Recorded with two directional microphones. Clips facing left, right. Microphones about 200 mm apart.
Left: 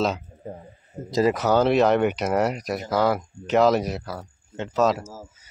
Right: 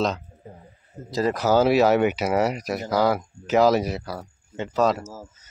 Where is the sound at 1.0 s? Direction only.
60° left (ahead or behind).